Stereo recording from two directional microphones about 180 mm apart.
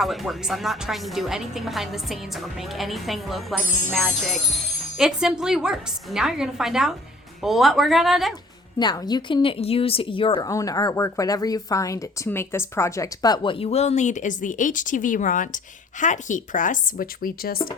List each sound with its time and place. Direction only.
0.0 s a woman's voice: centre (ahead or behind)
8.8 s a woman's voice: 25° left (ahead or behind)
10.5 s speech: 20° left (ahead or behind); by 17.7 s 55° left (ahead or behind)